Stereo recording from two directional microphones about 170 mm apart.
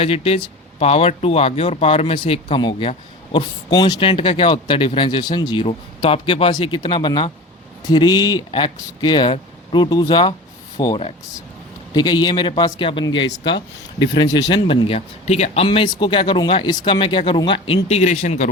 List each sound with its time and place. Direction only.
0.0 s speech: 35° left (ahead or behind)
17.8 s speech: 40° left (ahead or behind)